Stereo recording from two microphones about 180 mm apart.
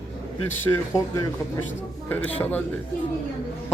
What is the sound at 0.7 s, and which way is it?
Speech, 20° left (ahead or behind).